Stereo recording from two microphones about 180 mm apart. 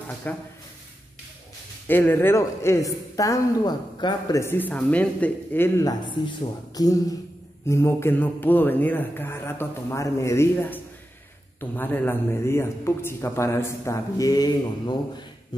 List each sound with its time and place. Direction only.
0.3 s a man's voice: 10° left (ahead or behind)
1.9 s a man's voice: 10° left (ahead or behind)